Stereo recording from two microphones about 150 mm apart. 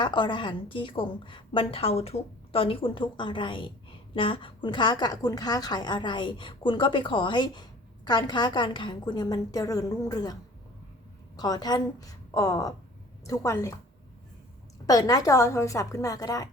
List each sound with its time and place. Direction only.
0.0 s a woman's voice: 30° left (ahead or behind)
11.3 s a woman's voice: 25° left (ahead or behind)
14.8 s a woman's voice: 25° left (ahead or behind)